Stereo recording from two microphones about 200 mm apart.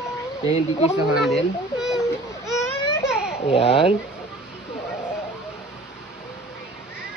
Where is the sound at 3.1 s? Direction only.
5° right (ahead or behind).